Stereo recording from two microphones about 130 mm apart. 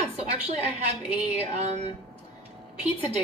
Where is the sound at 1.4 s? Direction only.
55° right (ahead or behind).